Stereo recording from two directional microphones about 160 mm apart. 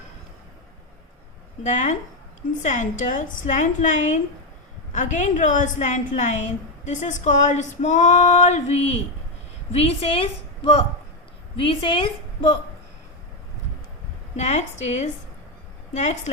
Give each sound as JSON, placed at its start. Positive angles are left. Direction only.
{"t": 1.6, "sound": "a woman's voice", "side_deg": 50}
{"t": 14.3, "sound": "a woman's voice", "side_deg": 45}